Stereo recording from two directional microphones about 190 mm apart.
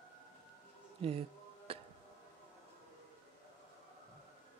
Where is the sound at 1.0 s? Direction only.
30° right (ahead or behind).